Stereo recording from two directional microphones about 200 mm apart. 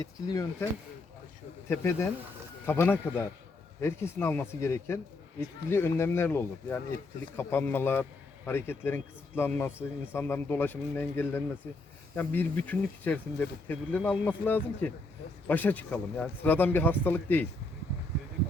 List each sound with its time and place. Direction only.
0.0 s speech: 15° left (ahead or behind)
1.7 s speech: 10° left (ahead or behind)